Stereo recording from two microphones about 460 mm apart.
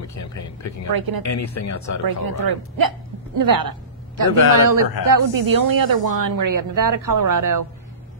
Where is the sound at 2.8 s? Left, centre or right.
Right.